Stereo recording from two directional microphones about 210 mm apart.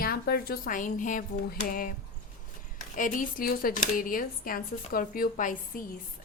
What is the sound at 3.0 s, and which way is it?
Speech, 40° left (ahead or behind).